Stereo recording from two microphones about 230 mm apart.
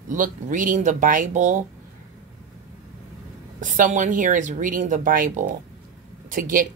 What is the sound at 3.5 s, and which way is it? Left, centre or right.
Speech, right.